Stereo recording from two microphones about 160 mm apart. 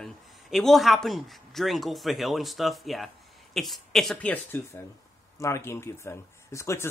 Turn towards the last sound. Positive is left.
turn(degrees=20)  # may be behind; listen again after turning